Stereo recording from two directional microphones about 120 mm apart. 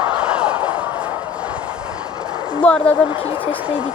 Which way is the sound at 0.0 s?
10° right (ahead or behind).